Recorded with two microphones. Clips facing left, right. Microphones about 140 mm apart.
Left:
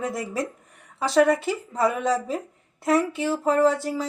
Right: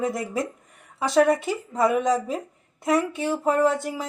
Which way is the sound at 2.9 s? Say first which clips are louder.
Left 1 dB; 20° right (ahead or behind).